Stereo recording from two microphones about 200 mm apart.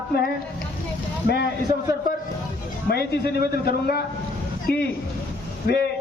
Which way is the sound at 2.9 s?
50° left (ahead or behind).